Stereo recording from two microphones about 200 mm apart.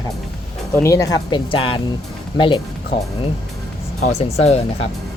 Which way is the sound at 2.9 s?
30° left (ahead or behind).